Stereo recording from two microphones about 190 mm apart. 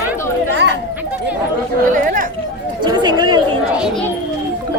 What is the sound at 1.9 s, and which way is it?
Speech, 45° right (ahead or behind).